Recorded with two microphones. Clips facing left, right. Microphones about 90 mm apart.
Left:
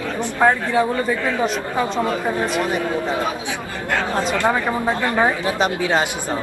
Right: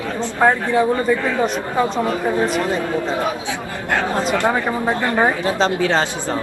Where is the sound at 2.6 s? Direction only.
15° left (ahead or behind).